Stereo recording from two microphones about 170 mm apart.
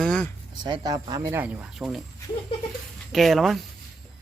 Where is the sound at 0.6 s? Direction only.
25° right (ahead or behind); by 2.0 s centre (ahead or behind).